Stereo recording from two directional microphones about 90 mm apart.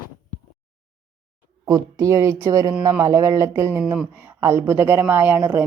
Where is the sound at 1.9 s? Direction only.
35° right (ahead or behind).